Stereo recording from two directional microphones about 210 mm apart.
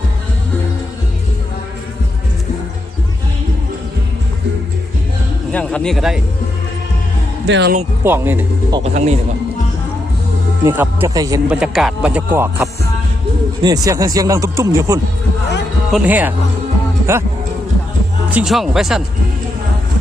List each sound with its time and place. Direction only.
5.5 s a man's voice: 5° left (ahead or behind)
7.4 s speech: 60° right (ahead or behind)
8.0 s speech: 10° right (ahead or behind)
8.8 s speech: 30° right (ahead or behind)
10.6 s speech: 10° right (ahead or behind)
11.4 s a man's voice: 5° right (ahead or behind)
18.3 s a man's voice: 5° right (ahead or behind)